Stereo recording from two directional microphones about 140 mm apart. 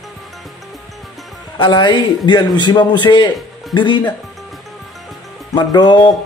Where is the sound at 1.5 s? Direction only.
35° left (ahead or behind).